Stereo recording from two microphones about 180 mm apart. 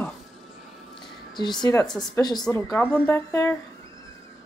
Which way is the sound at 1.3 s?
25° left (ahead or behind).